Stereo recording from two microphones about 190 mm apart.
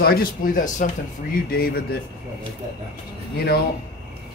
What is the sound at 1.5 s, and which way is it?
Speech, 55° left (ahead or behind).